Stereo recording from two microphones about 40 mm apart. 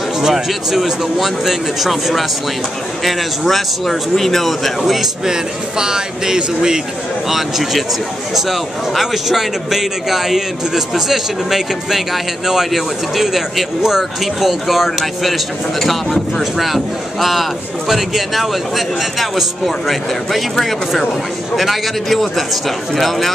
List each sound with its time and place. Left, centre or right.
0.2 s speech: centre
5.2 s a man's voice: centre
7.2 s a man's voice: centre